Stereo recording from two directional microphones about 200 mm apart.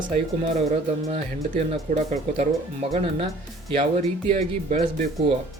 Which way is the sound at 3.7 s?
30° right (ahead or behind).